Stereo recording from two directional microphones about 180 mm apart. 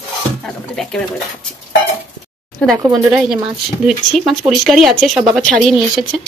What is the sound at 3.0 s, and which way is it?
Speech, 5° right (ahead or behind).